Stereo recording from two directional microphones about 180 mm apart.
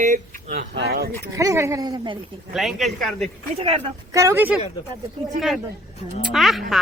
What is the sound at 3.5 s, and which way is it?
Speech, 30° right (ahead or behind).